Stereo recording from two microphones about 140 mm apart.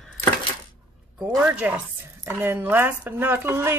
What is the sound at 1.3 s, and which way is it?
Speech, 20° right (ahead or behind).